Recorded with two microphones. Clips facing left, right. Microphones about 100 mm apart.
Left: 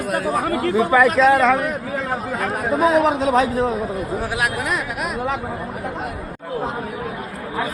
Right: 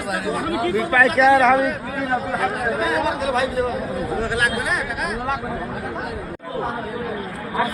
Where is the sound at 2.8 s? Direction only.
35° left (ahead or behind).